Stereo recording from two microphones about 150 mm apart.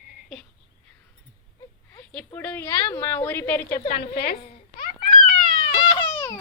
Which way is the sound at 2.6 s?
25° left (ahead or behind).